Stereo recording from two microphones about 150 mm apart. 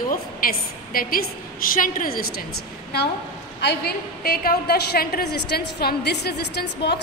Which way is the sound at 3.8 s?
85° left.